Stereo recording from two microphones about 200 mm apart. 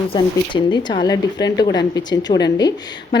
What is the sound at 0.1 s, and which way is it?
A woman's voice, 25° left (ahead or behind).